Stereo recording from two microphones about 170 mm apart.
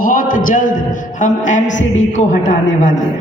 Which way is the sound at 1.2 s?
50° left (ahead or behind).